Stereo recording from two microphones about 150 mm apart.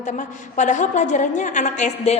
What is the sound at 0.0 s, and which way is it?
A woman's voice, 55° left (ahead or behind).